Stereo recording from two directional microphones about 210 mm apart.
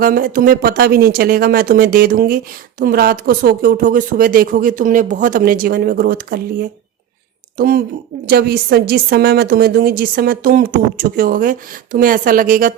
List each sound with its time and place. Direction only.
0.0 s speech: 45° right (ahead or behind)